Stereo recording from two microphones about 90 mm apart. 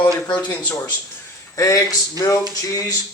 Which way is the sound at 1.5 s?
35° left (ahead or behind).